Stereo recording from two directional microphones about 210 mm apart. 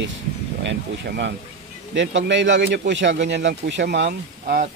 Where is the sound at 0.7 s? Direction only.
55° right (ahead or behind).